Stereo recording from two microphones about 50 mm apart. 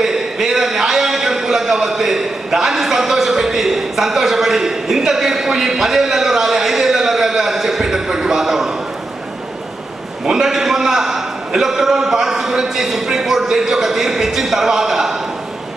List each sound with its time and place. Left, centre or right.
0.0 s a man's voice: centre
10.2 s a man's voice: centre